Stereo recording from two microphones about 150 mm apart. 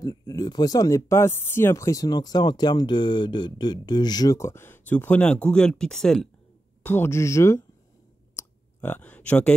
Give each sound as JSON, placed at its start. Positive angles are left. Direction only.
{"t": 0.0, "sound": "speech", "side_deg": 25}
{"t": 6.8, "sound": "speech", "side_deg": 15}
{"t": 8.4, "sound": "clicking", "side_deg": 10}